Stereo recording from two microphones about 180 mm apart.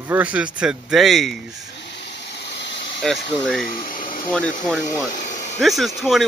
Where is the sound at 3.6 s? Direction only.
50° left (ahead or behind).